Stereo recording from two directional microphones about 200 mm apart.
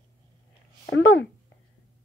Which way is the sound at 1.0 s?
80° left.